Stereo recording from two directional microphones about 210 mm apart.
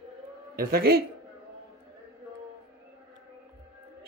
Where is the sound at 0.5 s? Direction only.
45° right (ahead or behind).